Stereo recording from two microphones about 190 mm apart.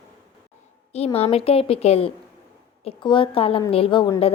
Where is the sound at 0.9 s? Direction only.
35° left (ahead or behind).